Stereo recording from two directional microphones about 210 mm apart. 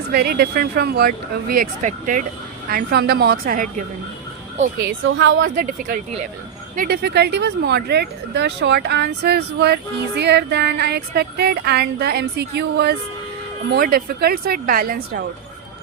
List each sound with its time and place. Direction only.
0.1 s speech: 45° right (ahead or behind)
5.0 s a woman's voice: 65° right (ahead or behind)
5.4 s speech: 40° right (ahead or behind)